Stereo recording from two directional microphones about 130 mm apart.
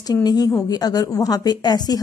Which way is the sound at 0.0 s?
30° left (ahead or behind).